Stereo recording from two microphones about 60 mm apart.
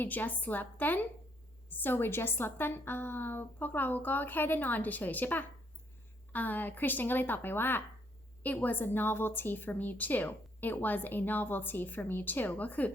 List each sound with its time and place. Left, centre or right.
0.0 s a woman's voice: left